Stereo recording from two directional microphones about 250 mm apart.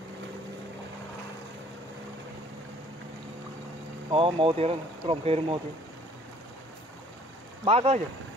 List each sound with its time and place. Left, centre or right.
4.1 s speech: right
7.6 s speech: right